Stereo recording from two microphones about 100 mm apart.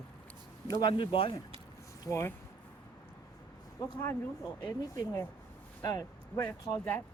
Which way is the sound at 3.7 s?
40° left (ahead or behind).